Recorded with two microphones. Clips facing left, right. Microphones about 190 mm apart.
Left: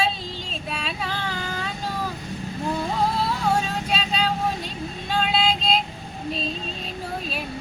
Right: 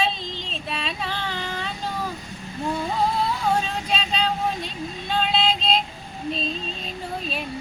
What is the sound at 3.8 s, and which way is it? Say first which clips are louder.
Vehicle: even; 5° left (ahead or behind).